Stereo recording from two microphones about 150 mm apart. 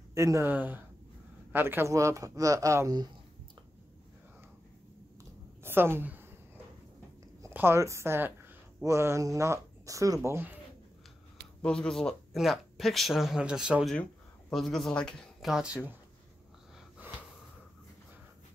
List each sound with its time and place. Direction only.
0.1 s speech: 20° right (ahead or behind)
5.6 s a sound: 15° right (ahead or behind)
7.4 s speech: 15° right (ahead or behind)
11.6 s speech: 5° left (ahead or behind)